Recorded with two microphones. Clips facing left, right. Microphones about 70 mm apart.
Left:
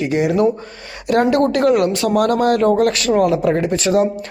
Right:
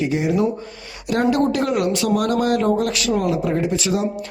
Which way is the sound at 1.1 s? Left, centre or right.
Left.